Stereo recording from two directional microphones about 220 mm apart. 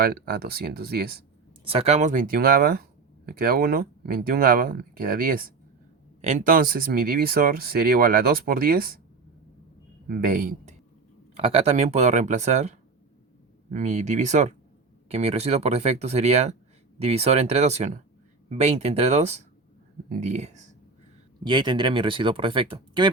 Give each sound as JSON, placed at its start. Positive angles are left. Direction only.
{"t": 0.0, "sound": "speech", "side_deg": -45}
{"t": 1.6, "sound": "speech", "side_deg": -25}
{"t": 10.1, "sound": "a man's voice", "side_deg": -40}
{"t": 11.3, "sound": "speech", "side_deg": -25}
{"t": 21.4, "sound": "speech", "side_deg": -20}